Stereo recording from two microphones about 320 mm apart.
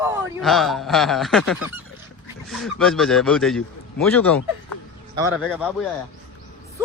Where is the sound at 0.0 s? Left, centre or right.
Centre.